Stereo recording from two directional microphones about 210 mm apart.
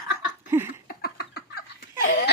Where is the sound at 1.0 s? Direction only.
50° left (ahead or behind).